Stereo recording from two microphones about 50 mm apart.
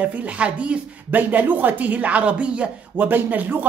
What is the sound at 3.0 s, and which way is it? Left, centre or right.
Speech, right.